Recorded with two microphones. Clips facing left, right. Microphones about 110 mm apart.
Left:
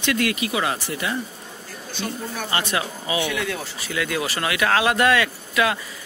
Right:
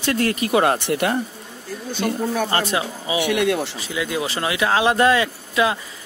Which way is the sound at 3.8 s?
20° right (ahead or behind).